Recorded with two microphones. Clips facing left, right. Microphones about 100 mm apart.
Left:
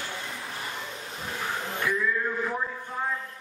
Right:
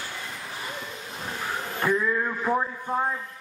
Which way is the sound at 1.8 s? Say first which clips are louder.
Right 4 dB; 40° right (ahead or behind).